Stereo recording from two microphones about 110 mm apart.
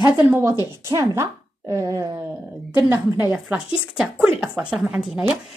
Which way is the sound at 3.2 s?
15° right (ahead or behind).